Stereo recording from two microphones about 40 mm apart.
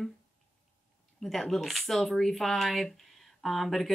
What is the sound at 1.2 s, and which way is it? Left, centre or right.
A woman's voice, centre.